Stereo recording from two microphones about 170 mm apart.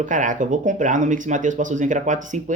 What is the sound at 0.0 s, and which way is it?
Speech, 50° right (ahead or behind).